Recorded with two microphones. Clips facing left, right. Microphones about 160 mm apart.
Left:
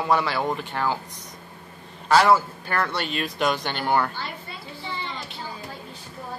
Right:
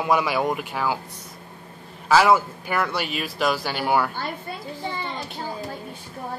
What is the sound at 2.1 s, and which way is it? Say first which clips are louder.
A man's voice: right 1 dB; 10° right (ahead or behind).